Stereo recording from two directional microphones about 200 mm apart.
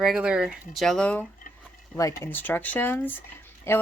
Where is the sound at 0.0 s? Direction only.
5° right (ahead or behind).